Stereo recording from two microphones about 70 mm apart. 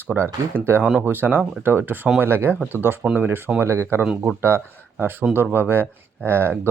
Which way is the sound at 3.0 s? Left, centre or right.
Centre.